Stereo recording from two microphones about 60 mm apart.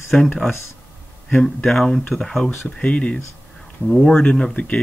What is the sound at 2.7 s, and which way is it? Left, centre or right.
Speech, centre.